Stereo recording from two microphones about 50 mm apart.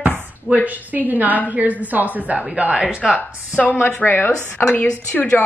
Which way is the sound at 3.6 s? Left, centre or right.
Left.